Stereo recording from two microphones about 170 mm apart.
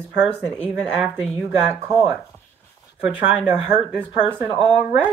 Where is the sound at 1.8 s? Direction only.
15° right (ahead or behind).